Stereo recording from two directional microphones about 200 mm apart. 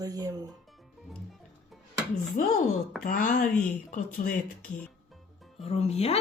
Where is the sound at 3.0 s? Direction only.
45° left (ahead or behind).